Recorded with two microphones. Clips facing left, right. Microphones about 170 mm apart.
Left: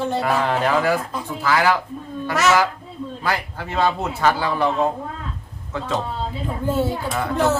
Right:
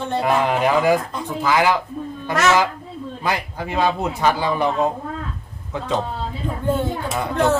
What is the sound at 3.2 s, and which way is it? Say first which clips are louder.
A man's voice: right 1 dB; 15° right (ahead or behind).